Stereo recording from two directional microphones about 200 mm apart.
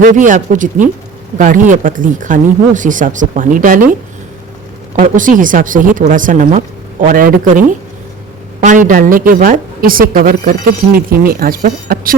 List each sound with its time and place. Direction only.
0.0 s speech: 40° right (ahead or behind)
4.9 s a woman's voice: 40° right (ahead or behind)
8.6 s a woman's voice: 40° right (ahead or behind)